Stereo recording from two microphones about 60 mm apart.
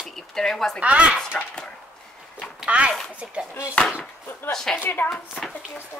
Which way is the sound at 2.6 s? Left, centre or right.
Centre.